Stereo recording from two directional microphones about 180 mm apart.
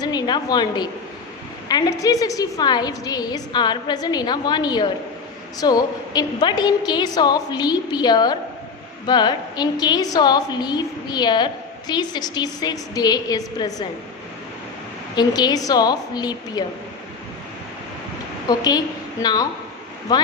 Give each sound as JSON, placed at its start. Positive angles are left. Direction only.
{"t": 0.0, "sound": "a woman's voice", "side_deg": 20}
{"t": 15.1, "sound": "a woman's voice", "side_deg": 20}
{"t": 18.4, "sound": "a woman's voice", "side_deg": 20}